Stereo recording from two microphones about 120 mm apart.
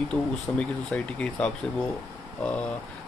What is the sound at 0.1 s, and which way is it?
Speech, 10° left (ahead or behind).